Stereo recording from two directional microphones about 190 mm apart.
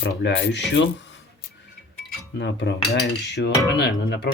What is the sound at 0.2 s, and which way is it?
Cutlery, 70° left (ahead or behind).